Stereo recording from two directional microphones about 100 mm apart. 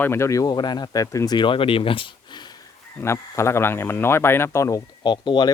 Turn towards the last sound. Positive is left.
turn(degrees=50)  # may be behind; listen again after turning